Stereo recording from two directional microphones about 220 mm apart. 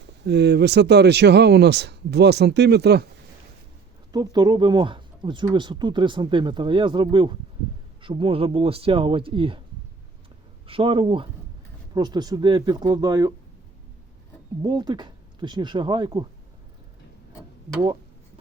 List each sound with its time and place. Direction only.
0.0 s speech: 50° right (ahead or behind)
4.1 s speech: 20° right (ahead or behind)
10.7 s speech: 25° right (ahead or behind)
14.6 s speech: 20° right (ahead or behind)